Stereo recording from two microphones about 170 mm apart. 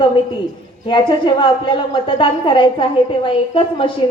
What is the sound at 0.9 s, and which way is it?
A woman's voice, 25° left (ahead or behind).